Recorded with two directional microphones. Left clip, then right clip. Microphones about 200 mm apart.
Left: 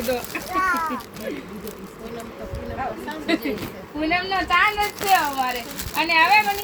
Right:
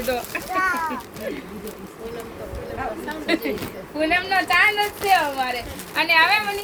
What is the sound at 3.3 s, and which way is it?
A woman's voice, 35° right (ahead or behind).